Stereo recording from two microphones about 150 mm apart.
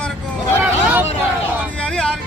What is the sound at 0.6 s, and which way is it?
Vehicle, 10° right (ahead or behind).